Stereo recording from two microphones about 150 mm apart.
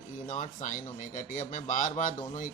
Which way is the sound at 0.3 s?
55° left (ahead or behind).